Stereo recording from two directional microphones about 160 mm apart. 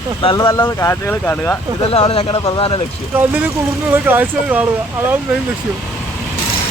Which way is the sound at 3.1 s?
10° right (ahead or behind).